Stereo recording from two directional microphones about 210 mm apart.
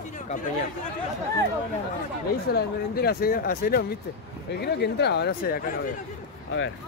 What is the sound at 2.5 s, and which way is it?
Speech, 45° left (ahead or behind).